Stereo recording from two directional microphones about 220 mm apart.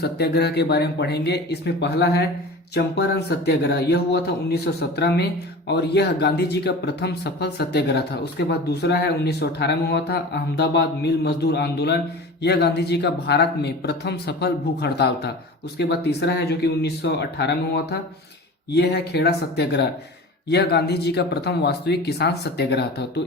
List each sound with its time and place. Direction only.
0.0 s speech: 50° left (ahead or behind)